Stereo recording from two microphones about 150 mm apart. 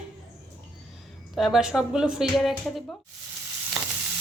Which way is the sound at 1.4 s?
Centre (ahead or behind).